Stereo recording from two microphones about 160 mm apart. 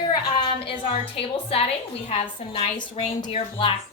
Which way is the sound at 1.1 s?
40° left (ahead or behind).